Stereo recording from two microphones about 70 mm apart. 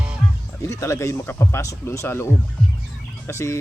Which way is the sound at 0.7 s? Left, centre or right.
Left.